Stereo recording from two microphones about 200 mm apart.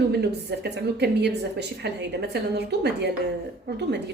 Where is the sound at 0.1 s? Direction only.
55° right (ahead or behind).